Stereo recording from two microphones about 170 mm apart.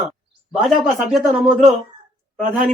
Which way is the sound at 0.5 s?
Centre (ahead or behind).